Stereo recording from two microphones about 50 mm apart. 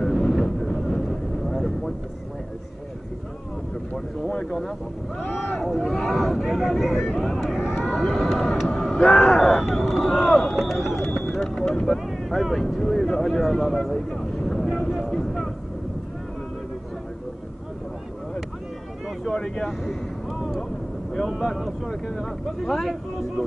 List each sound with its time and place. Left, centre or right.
0.0 s vehicle: centre
4.3 s speech: centre
5.6 s a sound: centre
7.3 s vehicle: centre
9.4 s speech: centre
11.4 s vehicle: centre
12.1 s speech: centre
19.0 s speech: centre
19.9 s speech: centre
21.1 s speech: centre
21.5 s speech: centre